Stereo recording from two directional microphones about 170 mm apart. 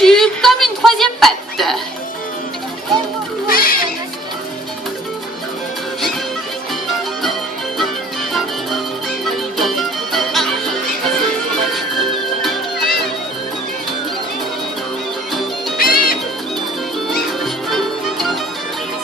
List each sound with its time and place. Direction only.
0.0 s a sound: centre (ahead or behind)
3.4 s children playing: 55° left (ahead or behind)
8.3 s music: centre (ahead or behind)
11.5 s music: centre (ahead or behind)
15.8 s music: 60° left (ahead or behind)
17.4 s music: centre (ahead or behind)